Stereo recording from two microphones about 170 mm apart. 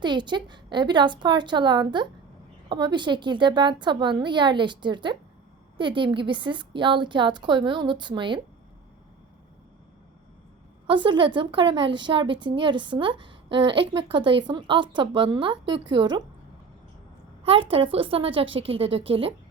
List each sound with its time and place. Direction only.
0.0 s a woman's voice: 25° right (ahead or behind)
10.8 s a woman's voice: 30° right (ahead or behind)
17.4 s a woman's voice: 30° right (ahead or behind)